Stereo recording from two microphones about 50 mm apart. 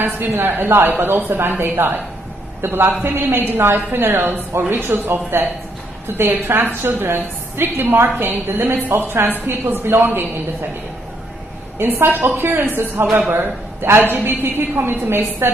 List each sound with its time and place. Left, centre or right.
0.0 s a woman's voice: right
11.8 s a woman's voice: right